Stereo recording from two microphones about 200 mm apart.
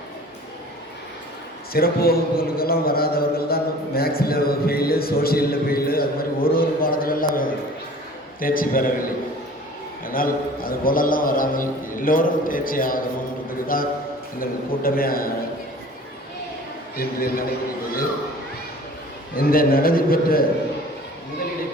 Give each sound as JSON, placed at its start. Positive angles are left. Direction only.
{"t": 1.7, "sound": "a man's voice", "side_deg": 50}
{"t": 17.0, "sound": "a man's voice", "side_deg": 45}
{"t": 19.4, "sound": "a man's voice", "side_deg": 45}